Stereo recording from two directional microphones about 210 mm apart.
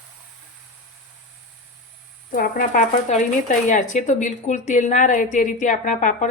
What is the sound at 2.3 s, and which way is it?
Speech, 40° left (ahead or behind).